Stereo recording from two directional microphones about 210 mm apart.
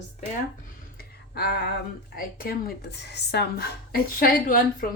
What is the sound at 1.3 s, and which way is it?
Speech, 50° left (ahead or behind).